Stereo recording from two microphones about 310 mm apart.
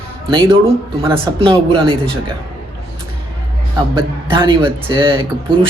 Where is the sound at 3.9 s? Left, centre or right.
Centre.